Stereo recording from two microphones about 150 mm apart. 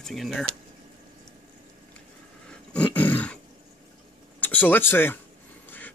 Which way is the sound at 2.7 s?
10° left (ahead or behind).